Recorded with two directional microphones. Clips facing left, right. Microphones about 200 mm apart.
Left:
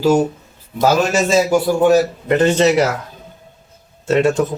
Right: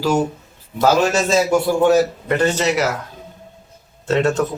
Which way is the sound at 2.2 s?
20° left (ahead or behind).